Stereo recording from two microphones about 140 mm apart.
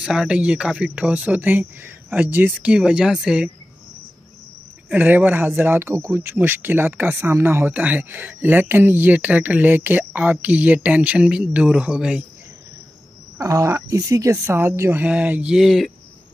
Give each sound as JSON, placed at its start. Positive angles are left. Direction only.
{"t": 0.0, "sound": "speech", "side_deg": -5}
{"t": 4.8, "sound": "speech", "side_deg": -10}
{"t": 13.4, "sound": "speech", "side_deg": -25}